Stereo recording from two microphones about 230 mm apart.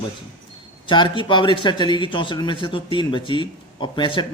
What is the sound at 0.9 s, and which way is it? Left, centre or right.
Speech, centre.